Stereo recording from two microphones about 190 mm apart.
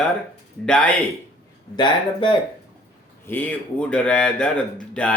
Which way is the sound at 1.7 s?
25° left (ahead or behind).